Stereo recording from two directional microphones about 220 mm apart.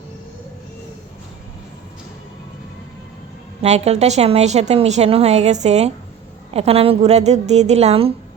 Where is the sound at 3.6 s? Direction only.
30° right (ahead or behind).